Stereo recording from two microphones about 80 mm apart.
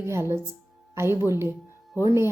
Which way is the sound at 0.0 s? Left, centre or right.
Right.